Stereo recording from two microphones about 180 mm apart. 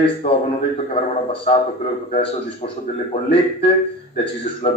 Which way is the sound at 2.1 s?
35° left (ahead or behind).